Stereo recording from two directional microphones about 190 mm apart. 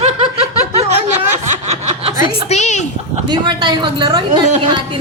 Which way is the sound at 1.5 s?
35° right (ahead or behind).